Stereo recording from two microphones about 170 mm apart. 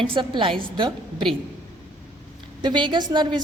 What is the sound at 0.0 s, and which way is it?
A woman's voice, 30° right (ahead or behind).